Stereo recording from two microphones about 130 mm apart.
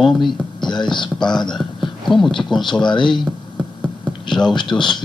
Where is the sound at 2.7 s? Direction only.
35° left (ahead or behind).